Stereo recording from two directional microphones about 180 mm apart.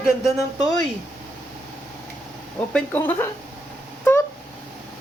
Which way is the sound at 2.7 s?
10° left (ahead or behind).